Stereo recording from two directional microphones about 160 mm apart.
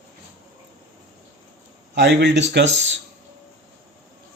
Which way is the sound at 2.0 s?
90° right.